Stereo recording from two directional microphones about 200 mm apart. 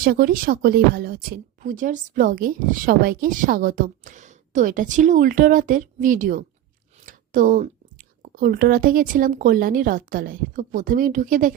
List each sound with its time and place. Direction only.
0.0 s a woman's voice: 45° right (ahead or behind)